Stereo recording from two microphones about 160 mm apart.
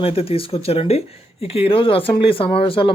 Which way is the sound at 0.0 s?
35° left (ahead or behind).